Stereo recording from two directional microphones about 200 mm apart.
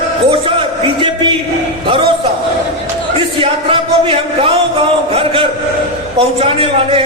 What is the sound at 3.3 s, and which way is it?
Speech, 25° right (ahead or behind).